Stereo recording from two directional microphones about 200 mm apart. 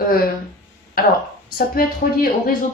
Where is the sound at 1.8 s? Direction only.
45° left (ahead or behind).